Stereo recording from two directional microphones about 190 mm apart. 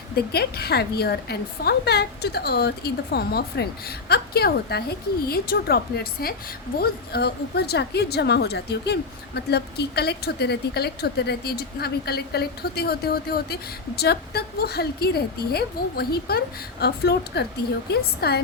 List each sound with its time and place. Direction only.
0.2 s a woman's voice: 55° left (ahead or behind)